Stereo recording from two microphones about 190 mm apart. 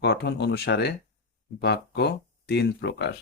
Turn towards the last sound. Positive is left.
turn(degrees=60)  # may be behind; listen again after turning